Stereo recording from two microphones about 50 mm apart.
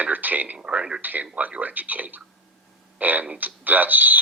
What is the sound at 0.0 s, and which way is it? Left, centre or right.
Speech, right.